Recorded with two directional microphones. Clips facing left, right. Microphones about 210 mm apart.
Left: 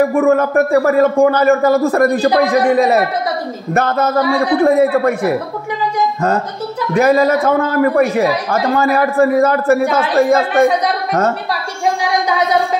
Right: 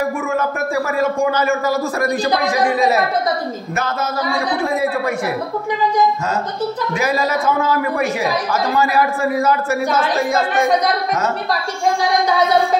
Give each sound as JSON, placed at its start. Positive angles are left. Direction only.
{"t": 0.1, "sound": "a man's voice", "side_deg": 60}
{"t": 3.7, "sound": "a man's voice", "side_deg": 55}
{"t": 7.0, "sound": "a man's voice", "side_deg": 55}